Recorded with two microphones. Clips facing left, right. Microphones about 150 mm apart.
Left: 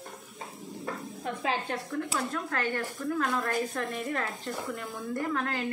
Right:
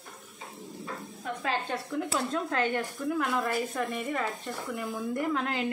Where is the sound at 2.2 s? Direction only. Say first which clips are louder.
Right 5 dB; 25° right (ahead or behind); by 5.0 s 5° right (ahead or behind).